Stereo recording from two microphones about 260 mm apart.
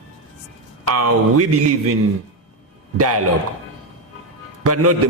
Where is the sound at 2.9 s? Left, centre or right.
Right.